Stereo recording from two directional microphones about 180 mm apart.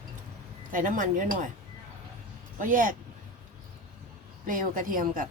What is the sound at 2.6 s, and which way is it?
Speech, 50° right (ahead or behind).